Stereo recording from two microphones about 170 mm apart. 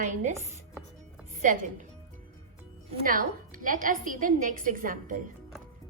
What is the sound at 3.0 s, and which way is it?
A woman's voice, 55° right (ahead or behind).